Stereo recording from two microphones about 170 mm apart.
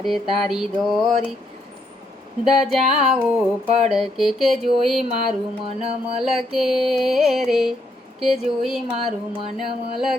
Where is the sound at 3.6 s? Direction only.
40° right (ahead or behind).